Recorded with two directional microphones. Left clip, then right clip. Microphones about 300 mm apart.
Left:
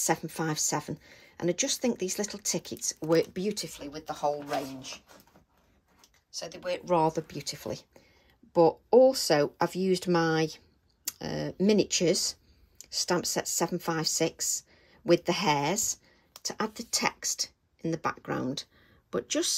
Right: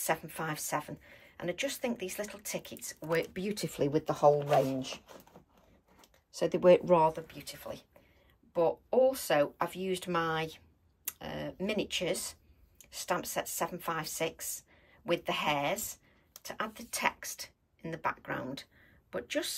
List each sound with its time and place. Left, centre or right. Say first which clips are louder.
0.0 s speech: left 4 dB; centre
3.8 s speech: right 6 dB; right
5.9 s typing: right 5 dB; right
7.3 s speech: left 7 dB; left